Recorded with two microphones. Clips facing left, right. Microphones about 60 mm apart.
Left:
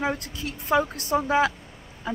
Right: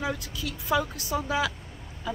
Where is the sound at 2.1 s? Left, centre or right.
Left.